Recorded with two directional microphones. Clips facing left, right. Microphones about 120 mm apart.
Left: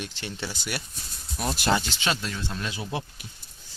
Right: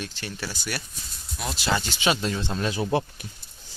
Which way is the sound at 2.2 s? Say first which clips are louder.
Right 5 dB; 30° right (ahead or behind).